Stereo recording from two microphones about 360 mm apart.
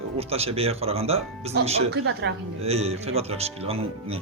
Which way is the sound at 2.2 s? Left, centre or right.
Right.